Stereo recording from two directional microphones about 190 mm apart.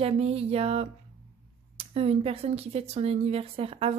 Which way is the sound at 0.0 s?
35° right (ahead or behind).